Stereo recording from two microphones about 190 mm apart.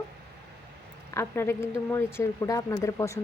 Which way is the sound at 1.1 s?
15° left (ahead or behind).